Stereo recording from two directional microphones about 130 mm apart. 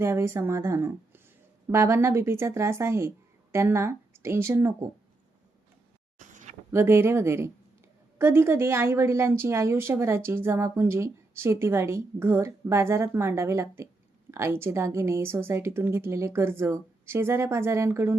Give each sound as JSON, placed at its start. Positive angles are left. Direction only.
{"t": 0.0, "sound": "a woman's voice", "side_deg": -20}
{"t": 6.1, "sound": "a sound", "side_deg": -70}
{"t": 6.7, "sound": "a woman's voice", "side_deg": -20}